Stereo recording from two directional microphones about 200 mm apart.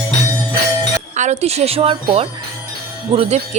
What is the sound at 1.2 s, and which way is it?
Speech, 35° right (ahead or behind).